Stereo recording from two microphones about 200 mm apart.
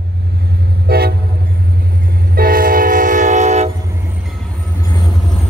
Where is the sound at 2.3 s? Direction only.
45° right (ahead or behind).